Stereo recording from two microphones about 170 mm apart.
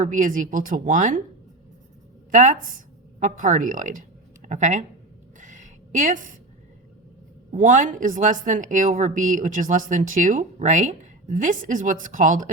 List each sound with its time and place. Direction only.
0.0 s a woman's voice: 50° right (ahead or behind)
2.3 s speech: 50° right (ahead or behind)
5.4 s a sound: 45° right (ahead or behind)
7.5 s a woman's voice: 50° right (ahead or behind)